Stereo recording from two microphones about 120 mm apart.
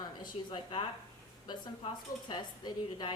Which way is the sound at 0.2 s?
45° left (ahead or behind).